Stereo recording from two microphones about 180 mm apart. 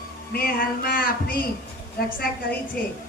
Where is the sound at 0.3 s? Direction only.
55° left (ahead or behind).